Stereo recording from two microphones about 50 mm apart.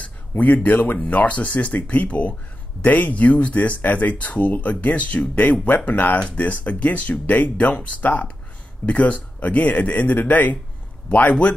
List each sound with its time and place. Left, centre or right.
0.4 s speech: left